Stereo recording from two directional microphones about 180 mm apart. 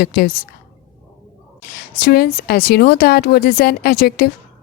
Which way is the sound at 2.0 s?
55° left (ahead or behind).